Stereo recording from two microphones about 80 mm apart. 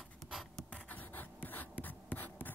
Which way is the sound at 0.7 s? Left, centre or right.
Centre.